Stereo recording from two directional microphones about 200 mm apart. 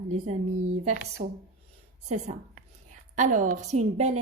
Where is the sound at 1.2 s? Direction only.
45° right (ahead or behind).